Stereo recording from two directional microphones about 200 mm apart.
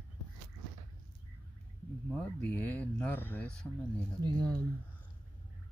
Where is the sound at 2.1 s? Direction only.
5° left (ahead or behind).